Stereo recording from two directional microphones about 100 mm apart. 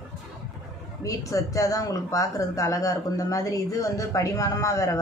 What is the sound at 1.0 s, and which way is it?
Speech, 35° left (ahead or behind).